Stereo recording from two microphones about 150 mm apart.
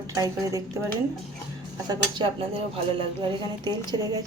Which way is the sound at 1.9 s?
35° right (ahead or behind).